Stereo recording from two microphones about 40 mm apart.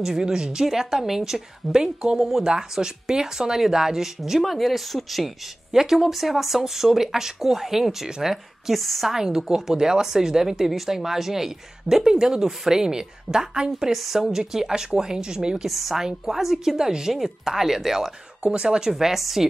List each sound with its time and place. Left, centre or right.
0.0 s a woman's voice: centre
2.1 s a woman's voice: centre
2.4 s a woman's voice: centre
4.4 s speech: centre
5.7 s a woman's voice: centre
8.7 s speech: centre
9.1 s a woman's voice: centre
15.7 s speech: centre
16.0 s a woman's voice: centre
16.7 s a woman's voice: centre
18.4 s speech: right
18.9 s a woman's voice: centre